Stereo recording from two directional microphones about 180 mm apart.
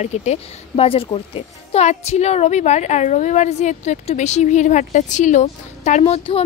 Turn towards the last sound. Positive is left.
turn(degrees=30)  # may be behind; listen again after turning